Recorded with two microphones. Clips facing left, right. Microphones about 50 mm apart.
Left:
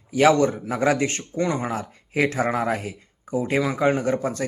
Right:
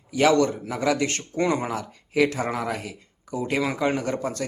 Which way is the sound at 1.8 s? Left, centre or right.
Left.